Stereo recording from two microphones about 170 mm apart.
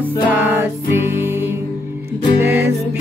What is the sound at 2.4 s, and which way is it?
Music, 15° right (ahead or behind).